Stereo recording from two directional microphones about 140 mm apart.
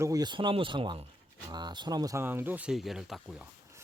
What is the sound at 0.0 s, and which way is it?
Speech, 25° right (ahead or behind).